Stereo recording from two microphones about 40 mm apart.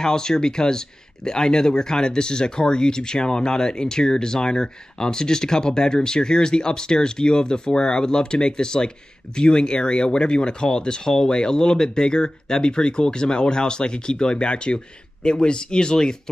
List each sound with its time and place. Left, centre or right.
0.0 s speech: centre